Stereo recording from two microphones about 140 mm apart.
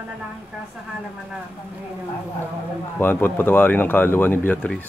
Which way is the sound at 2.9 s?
15° left (ahead or behind).